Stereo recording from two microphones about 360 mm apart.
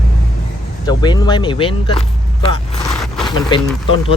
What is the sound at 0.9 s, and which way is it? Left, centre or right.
Speech, centre.